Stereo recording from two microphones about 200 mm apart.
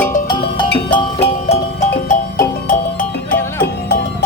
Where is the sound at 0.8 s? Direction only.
25° left (ahead or behind); by 3.3 s 45° left (ahead or behind).